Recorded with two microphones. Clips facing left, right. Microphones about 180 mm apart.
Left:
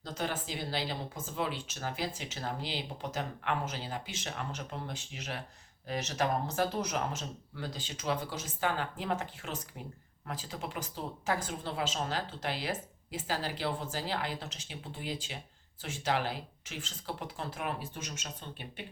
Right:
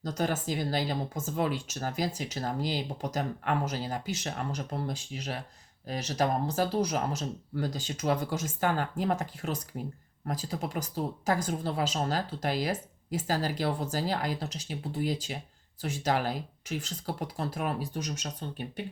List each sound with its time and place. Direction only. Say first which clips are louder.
0.0 s speech: right 6 dB; 45° right (ahead or behind)